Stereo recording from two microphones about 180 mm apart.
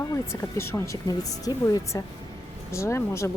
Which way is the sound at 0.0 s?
15° left (ahead or behind).